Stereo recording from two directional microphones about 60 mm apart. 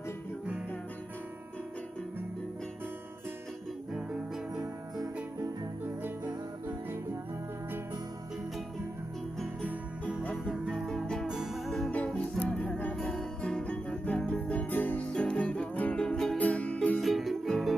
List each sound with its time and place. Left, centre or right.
3.9 s music: centre
10.3 s music: centre
10.7 s music: centre
11.2 s music: centre
12.4 s music: left
16.0 s music: centre
17.0 s music: centre